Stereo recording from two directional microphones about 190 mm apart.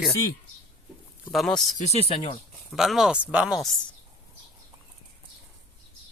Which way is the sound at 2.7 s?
Centre (ahead or behind).